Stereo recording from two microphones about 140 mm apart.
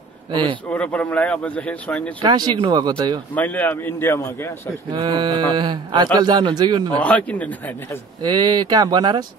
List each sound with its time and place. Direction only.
0.3 s a man's voice: 35° right (ahead or behind)
0.7 s a man's voice: 10° left (ahead or behind)
2.2 s a man's voice: 30° right (ahead or behind)
3.3 s a man's voice: 10° left (ahead or behind)
4.9 s a man's voice: 35° right (ahead or behind)
7.0 s a man's voice: 10° left (ahead or behind)
8.2 s speech: 30° right (ahead or behind)